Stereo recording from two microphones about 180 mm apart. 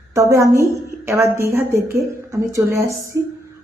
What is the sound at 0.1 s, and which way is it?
A woman's voice, 15° right (ahead or behind).